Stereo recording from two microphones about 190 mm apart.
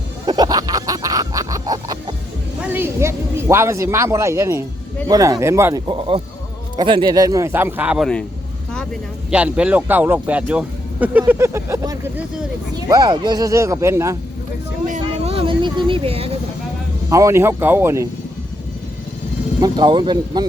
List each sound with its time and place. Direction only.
0.3 s a sound: 20° right (ahead or behind)
2.7 s speech: 15° right (ahead or behind)
5.9 s speech: 30° right (ahead or behind); by 8.2 s centre (ahead or behind)
8.7 s vehicle: 5° left (ahead or behind)
9.3 s speech: 5° right (ahead or behind)
15.2 s vehicle: 30° right (ahead or behind)
17.1 s speech: 15° right (ahead or behind)
19.6 s speech: 25° right (ahead or behind)